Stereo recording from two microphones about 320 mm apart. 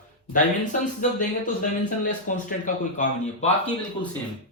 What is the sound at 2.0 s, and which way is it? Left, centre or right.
Speech, left.